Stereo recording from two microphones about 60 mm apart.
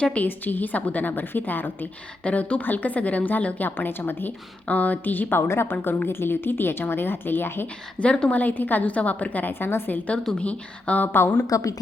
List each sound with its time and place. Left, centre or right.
0.0 s a woman's voice: left
0.3 s a woman's voice: left
5.4 s a woman's voice: left
5.7 s a woman's voice: left
7.9 s a woman's voice: centre
8.4 s a woman's voice: left
10.3 s a woman's voice: left
11.4 s a woman's voice: left